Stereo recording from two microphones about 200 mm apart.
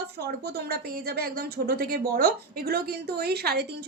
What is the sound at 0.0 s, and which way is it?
A woman's voice, 50° right (ahead or behind).